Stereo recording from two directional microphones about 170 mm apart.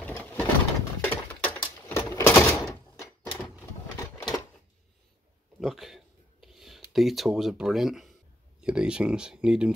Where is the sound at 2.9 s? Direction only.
15° left (ahead or behind).